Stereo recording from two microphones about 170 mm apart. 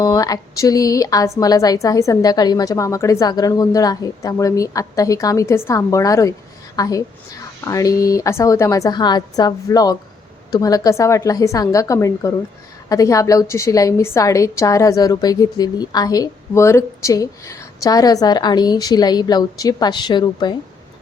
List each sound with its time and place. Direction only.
0.0 s a woman's voice: 20° left (ahead or behind)